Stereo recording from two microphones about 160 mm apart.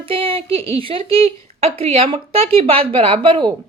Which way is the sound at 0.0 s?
35° right (ahead or behind).